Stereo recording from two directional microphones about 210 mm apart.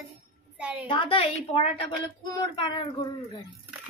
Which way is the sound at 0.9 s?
25° left (ahead or behind).